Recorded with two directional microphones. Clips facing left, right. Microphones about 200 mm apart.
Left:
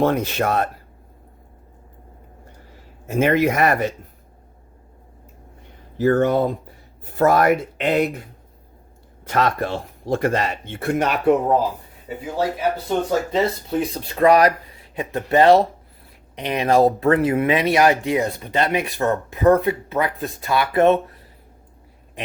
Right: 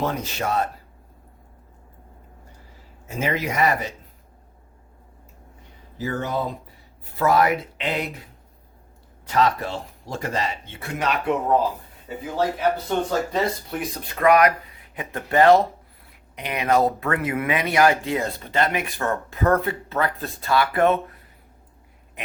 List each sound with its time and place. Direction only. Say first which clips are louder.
0.0 s speech: left 7 dB; 55° left (ahead or behind)
3.1 s speech: left 8 dB; 60° left (ahead or behind)
6.0 s speech: left 9 dB; 55° left (ahead or behind)
12.1 s speech: left 2 dB; 15° left (ahead or behind)
13.3 s speech: left 4 dB; 25° left (ahead or behind)